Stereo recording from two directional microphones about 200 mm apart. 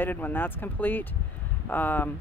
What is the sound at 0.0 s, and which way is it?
Speech, 10° left (ahead or behind).